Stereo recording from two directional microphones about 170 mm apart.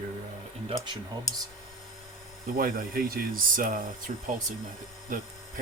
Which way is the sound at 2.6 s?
55° right (ahead or behind).